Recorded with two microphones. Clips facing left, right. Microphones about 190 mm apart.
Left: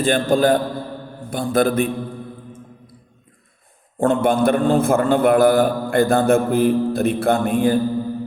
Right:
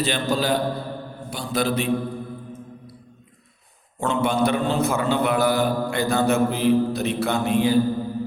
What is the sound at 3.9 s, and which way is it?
A man's voice, 50° left (ahead or behind).